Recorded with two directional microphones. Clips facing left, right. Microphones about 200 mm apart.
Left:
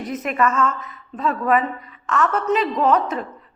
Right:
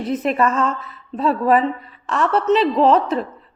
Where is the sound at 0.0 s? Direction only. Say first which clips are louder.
Right 3 dB; 30° right (ahead or behind).